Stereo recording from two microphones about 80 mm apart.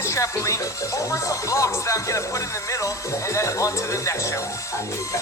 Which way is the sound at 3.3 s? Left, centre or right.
Left.